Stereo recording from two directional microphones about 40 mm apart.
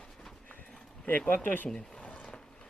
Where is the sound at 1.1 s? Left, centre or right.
Left.